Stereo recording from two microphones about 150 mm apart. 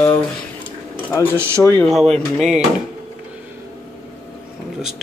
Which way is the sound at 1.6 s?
20° left (ahead or behind).